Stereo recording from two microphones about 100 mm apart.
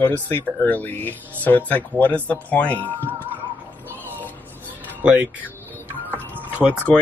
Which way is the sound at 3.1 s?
20° right (ahead or behind).